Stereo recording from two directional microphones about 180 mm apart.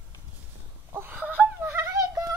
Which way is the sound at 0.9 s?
10° right (ahead or behind).